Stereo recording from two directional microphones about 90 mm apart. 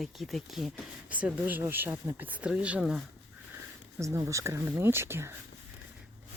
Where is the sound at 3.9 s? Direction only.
35° right (ahead or behind).